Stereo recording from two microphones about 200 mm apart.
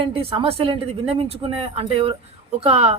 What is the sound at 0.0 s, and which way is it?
Speech, 30° right (ahead or behind).